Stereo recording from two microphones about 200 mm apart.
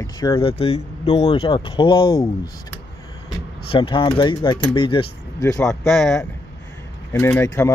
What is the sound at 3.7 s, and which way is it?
Speech, 25° left (ahead or behind).